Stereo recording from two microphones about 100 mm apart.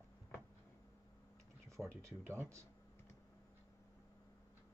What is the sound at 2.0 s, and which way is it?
Speech, 30° right (ahead or behind).